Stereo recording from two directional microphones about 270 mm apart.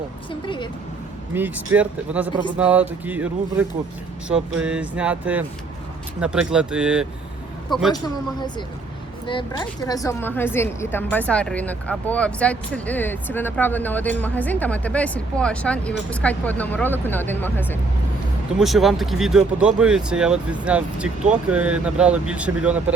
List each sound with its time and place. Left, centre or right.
0.3 s a woman's voice: centre
1.3 s speech: centre
7.9 s a woman's voice: centre